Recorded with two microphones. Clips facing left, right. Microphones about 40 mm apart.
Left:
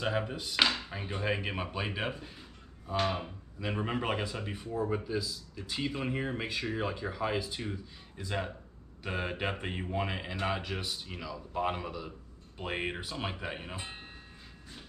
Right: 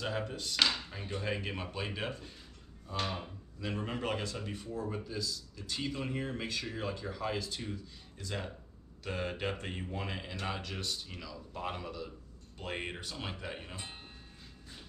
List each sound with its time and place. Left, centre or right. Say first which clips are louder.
0.0 s speech: left 4 dB; centre